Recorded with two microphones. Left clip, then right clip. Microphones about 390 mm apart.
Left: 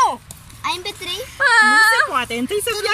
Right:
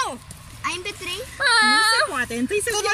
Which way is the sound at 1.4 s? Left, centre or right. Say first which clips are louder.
Left 5 dB; centre.